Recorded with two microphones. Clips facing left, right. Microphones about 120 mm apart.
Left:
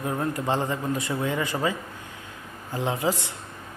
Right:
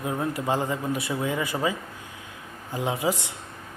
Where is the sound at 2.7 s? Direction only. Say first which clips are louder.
Even; 15° right (ahead or behind).